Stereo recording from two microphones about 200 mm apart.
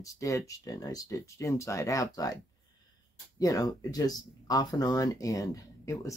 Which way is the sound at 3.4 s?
20° left (ahead or behind).